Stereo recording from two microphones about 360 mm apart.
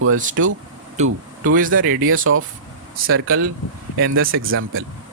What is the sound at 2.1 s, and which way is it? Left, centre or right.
Speech, right.